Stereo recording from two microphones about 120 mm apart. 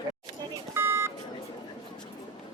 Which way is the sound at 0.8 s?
20° right (ahead or behind).